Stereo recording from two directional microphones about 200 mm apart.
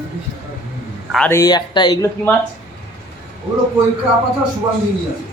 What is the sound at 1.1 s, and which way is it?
Speech, 5° left (ahead or behind).